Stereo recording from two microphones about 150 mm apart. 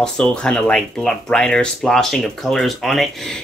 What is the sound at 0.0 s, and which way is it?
Speech, 5° left (ahead or behind).